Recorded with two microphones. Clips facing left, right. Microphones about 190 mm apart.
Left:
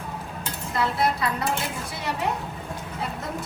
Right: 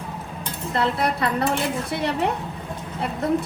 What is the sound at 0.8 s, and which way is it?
Speech, 60° right (ahead or behind).